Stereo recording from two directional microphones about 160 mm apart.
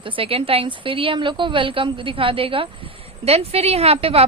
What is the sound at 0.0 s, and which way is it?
A woman's voice, 35° right (ahead or behind).